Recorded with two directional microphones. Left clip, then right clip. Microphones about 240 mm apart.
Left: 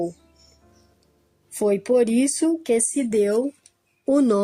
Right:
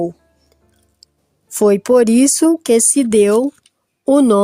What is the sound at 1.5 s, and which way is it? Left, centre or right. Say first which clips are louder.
Speech: right 8 dB; right.